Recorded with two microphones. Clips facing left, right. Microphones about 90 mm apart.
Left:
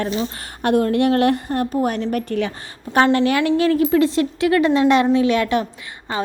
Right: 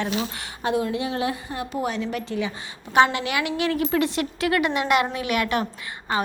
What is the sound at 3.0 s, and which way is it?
A woman's voice, 45° left (ahead or behind).